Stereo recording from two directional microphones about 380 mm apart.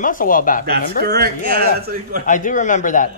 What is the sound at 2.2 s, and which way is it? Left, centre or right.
Speech, centre.